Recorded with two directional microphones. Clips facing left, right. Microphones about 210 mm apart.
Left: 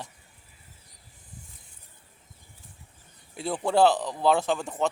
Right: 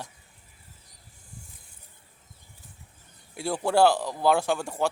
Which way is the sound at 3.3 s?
10° right (ahead or behind).